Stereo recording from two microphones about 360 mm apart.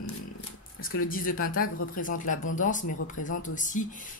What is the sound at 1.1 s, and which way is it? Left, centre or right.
Speech, left.